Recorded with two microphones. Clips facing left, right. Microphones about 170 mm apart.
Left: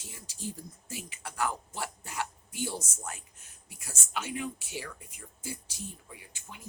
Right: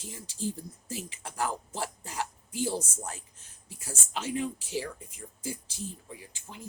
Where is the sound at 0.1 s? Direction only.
30° right (ahead or behind).